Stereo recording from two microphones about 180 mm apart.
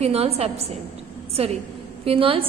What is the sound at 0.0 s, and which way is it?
A woman's voice, 35° right (ahead or behind).